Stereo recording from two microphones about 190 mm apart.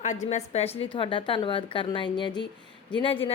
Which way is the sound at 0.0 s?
40° left (ahead or behind).